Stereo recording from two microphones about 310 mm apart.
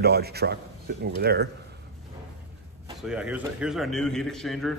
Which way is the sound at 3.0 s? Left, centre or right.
Centre.